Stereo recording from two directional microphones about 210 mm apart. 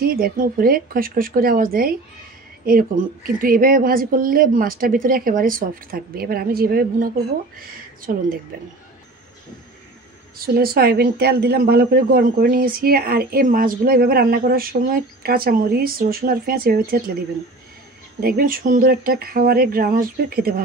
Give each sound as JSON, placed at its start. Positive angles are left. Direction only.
{"t": 0.0, "sound": "speech", "side_deg": -45}
{"t": 10.4, "sound": "speech", "side_deg": -45}
{"t": 18.2, "sound": "speech", "side_deg": -45}